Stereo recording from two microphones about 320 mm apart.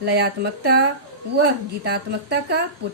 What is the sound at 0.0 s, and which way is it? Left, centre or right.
A woman's voice, right.